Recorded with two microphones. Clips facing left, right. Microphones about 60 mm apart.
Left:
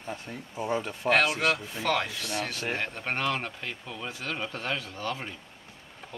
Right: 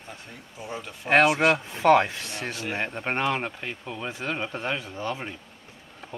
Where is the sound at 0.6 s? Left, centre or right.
Left.